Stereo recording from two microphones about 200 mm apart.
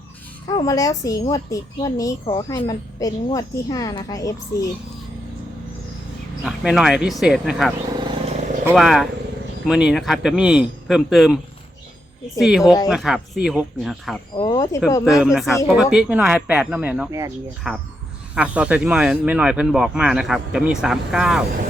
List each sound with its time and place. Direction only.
0.4 s a woman's voice: 20° left (ahead or behind)
6.4 s speech: centre (ahead or behind)
8.0 s vehicle: 30° right (ahead or behind)
8.7 s speech: centre (ahead or behind)
12.4 s speech: centre (ahead or behind)
14.3 s speech: 20° left (ahead or behind)
15.0 s speech: centre (ahead or behind)
17.7 s speech: centre (ahead or behind)